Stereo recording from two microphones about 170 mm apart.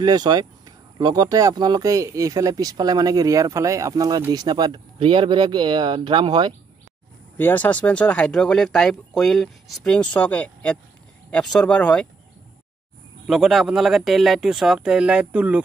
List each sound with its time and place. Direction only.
0.0 s speech: 25° right (ahead or behind)
7.3 s speech: 10° left (ahead or behind)
13.3 s speech: centre (ahead or behind)